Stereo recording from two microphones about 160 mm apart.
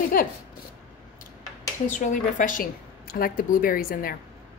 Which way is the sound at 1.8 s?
50° left (ahead or behind).